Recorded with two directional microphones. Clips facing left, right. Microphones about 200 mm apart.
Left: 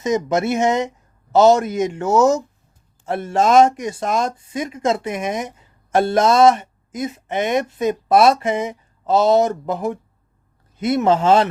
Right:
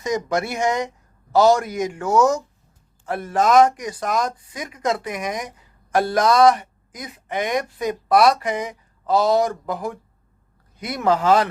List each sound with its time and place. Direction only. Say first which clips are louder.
0.0 s speech: left 4 dB; 20° left (ahead or behind)